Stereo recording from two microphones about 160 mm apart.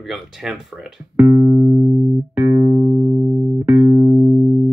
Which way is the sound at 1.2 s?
20° right (ahead or behind).